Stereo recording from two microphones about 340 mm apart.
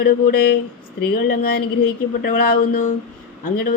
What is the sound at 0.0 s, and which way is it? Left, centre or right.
Speech, left.